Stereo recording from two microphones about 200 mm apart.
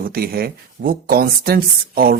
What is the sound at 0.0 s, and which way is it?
Speech, 50° right (ahead or behind).